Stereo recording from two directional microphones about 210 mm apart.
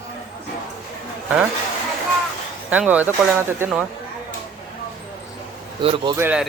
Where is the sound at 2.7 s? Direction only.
5° right (ahead or behind).